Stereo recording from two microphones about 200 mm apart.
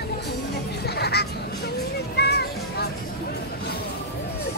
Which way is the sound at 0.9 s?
55° left (ahead or behind).